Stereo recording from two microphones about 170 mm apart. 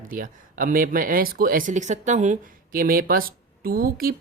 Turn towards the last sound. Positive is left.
turn(degrees=-60)  # may be behind; listen again after turning